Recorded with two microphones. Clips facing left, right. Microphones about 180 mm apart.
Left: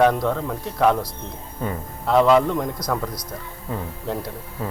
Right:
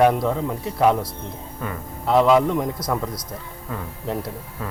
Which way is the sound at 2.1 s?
Centre (ahead or behind).